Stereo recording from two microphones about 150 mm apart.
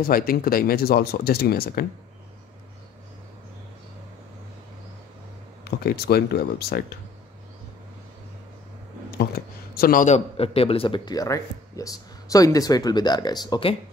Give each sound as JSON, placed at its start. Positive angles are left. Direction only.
{"t": 0.0, "sound": "speech", "side_deg": 75}
{"t": 5.9, "sound": "speech", "side_deg": 90}
{"t": 9.8, "sound": "a man's voice", "side_deg": 75}
{"t": 10.0, "sound": "speech", "side_deg": 45}